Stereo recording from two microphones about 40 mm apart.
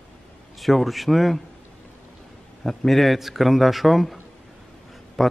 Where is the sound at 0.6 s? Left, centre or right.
Centre.